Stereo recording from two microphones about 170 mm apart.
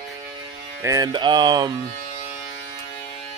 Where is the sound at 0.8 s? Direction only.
20° right (ahead or behind).